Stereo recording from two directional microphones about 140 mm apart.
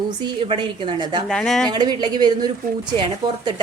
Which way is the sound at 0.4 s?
35° right (ahead or behind).